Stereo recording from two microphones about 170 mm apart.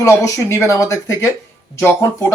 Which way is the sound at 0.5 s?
15° left (ahead or behind).